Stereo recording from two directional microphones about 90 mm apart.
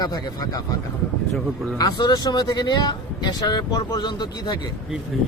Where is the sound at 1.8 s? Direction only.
45° left (ahead or behind).